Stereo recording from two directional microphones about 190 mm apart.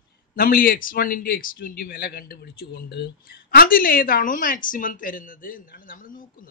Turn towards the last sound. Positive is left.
turn(degrees=45)  # may be behind; listen again after turning